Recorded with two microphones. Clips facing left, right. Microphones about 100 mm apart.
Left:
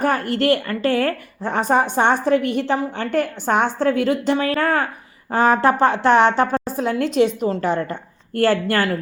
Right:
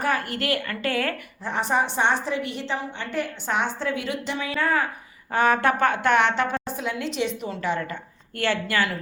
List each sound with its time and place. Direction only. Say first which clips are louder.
0.0 s a woman's voice: left 7 dB; 40° left (ahead or behind)
5.3 s a woman's voice: left 5 dB; 35° left (ahead or behind)